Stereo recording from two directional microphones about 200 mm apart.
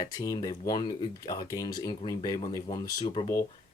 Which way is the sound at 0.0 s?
20° left (ahead or behind).